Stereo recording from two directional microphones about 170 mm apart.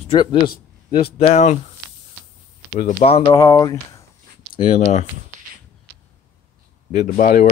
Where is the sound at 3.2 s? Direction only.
20° left (ahead or behind).